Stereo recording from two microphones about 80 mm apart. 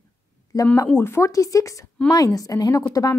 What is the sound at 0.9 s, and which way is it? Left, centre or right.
A woman's voice, left.